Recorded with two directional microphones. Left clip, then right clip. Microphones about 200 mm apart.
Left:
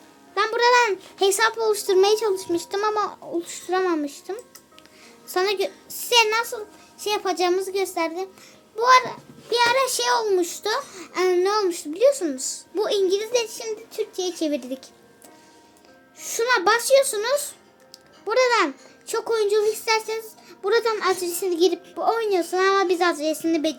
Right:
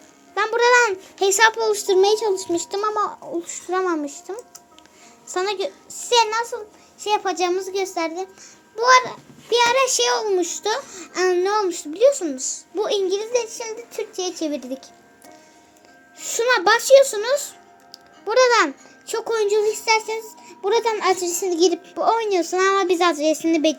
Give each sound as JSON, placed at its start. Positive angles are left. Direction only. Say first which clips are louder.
{"t": 0.3, "sound": "babbling", "louder": "right 2 dB", "side_deg": 5}
{"t": 0.9, "sound": "a sound", "louder": "right 1 dB", "side_deg": 5}
{"t": 1.4, "sound": "a child's voice", "louder": "right 4 dB", "side_deg": -5}
{"t": 16.1, "sound": "a child's voice", "louder": "right 2 dB", "side_deg": -5}
{"t": 21.7, "sound": "a child's voice", "louder": "right 3 dB", "side_deg": -15}